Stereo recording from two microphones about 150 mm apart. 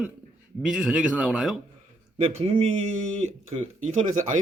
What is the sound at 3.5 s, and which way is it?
Speech, 35° right (ahead or behind).